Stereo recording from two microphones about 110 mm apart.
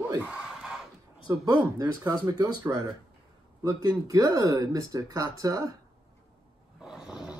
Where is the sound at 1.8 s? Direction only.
35° right (ahead or behind).